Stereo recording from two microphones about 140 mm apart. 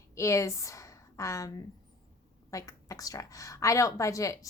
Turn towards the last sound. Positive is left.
turn(degrees=25)  # may be behind; listen again after turning